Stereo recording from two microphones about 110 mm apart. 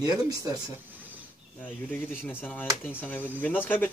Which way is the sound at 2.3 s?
15° left (ahead or behind).